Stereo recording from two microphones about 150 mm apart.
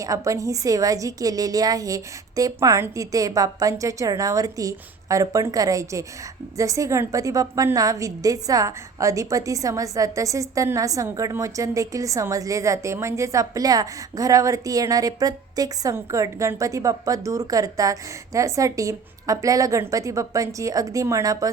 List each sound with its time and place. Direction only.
0.0 s a woman's voice: 20° right (ahead or behind)